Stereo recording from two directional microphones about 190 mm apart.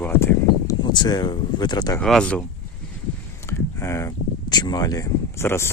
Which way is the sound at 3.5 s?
15° left (ahead or behind).